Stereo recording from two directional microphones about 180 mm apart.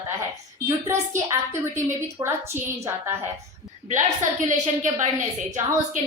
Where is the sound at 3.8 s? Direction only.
45° right (ahead or behind).